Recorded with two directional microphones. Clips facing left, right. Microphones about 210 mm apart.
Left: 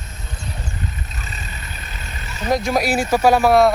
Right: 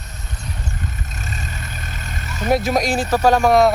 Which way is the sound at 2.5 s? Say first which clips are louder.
Right 1 dB; 5° right (ahead or behind).